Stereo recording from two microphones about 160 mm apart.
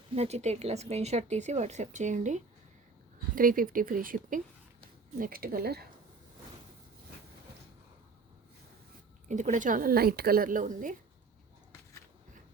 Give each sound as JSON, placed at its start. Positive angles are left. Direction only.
{"t": 0.1, "sound": "a woman's voice", "side_deg": -40}
{"t": 3.3, "sound": "a woman's voice", "side_deg": -60}
{"t": 9.3, "sound": "a woman's voice", "side_deg": -50}